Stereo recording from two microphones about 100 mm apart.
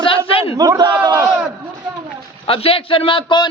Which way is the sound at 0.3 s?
65° left (ahead or behind).